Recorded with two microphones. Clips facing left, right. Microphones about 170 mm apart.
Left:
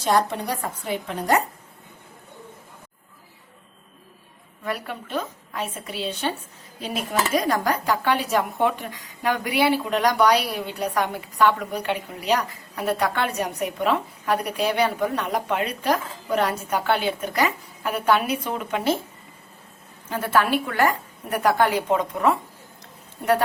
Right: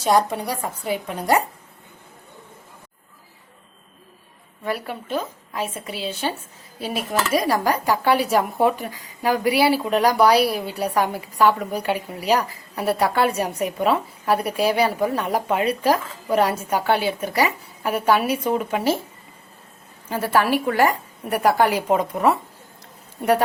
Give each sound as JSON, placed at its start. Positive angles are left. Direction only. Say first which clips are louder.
{"t": 0.0, "sound": "a woman's voice", "louder": "right 2 dB", "side_deg": -10}
{"t": 4.6, "sound": "a woman's voice", "louder": "right 3 dB", "side_deg": -5}
{"t": 15.2, "sound": "speech", "louder": "right 3 dB", "side_deg": -35}
{"t": 15.5, "sound": "a woman's voice", "louder": "right 5 dB", "side_deg": -10}
{"t": 20.1, "sound": "a woman's voice", "louder": "right 2 dB", "side_deg": -10}